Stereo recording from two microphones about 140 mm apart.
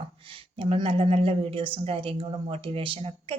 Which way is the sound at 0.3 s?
40° right (ahead or behind).